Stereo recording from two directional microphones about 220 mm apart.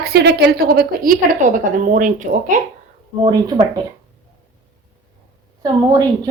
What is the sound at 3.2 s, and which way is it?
Speech, 20° right (ahead or behind).